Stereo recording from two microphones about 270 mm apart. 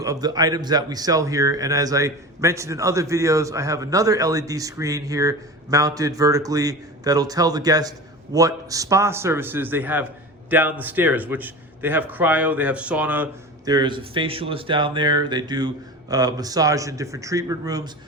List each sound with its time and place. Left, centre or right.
0.0 s speech: centre
13.7 s speech: centre